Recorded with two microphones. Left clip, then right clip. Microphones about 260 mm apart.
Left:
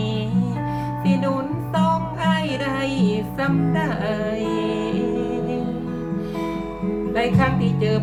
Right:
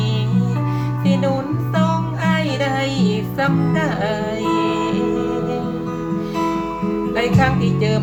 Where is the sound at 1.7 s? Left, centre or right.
Centre.